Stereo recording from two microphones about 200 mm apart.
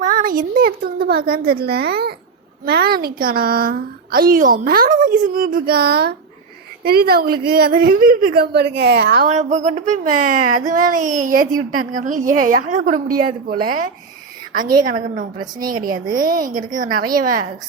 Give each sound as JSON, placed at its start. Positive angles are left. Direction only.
{"t": 0.0, "sound": "a child's voice", "side_deg": -45}
{"t": 9.3, "sound": "a woman's voice", "side_deg": -35}
{"t": 14.6, "sound": "a woman's voice", "side_deg": -20}
{"t": 14.8, "sound": "a woman's voice", "side_deg": -40}